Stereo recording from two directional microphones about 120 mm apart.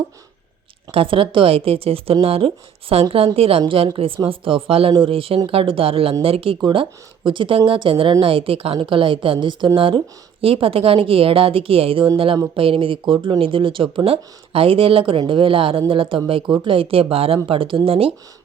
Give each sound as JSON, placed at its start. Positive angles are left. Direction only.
{"t": 0.9, "sound": "a woman's voice", "side_deg": -50}
{"t": 6.6, "sound": "a woman's voice", "side_deg": -40}